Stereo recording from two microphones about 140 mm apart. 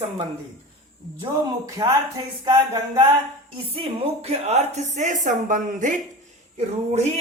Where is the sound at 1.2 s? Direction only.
30° right (ahead or behind).